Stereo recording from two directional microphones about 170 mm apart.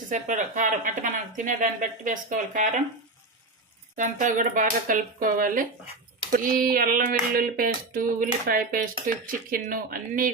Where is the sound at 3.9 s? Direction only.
50° right (ahead or behind).